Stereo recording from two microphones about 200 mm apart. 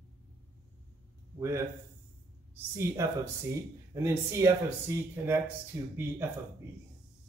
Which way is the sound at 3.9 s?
15° right (ahead or behind).